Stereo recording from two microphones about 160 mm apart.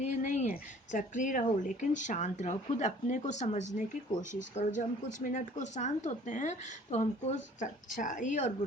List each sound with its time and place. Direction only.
0.0 s a woman's voice: 50° left (ahead or behind)